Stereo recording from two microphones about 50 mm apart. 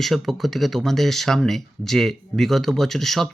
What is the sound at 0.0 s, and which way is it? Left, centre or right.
Speech, centre.